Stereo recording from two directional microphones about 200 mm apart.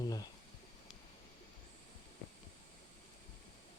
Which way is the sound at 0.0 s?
20° left (ahead or behind).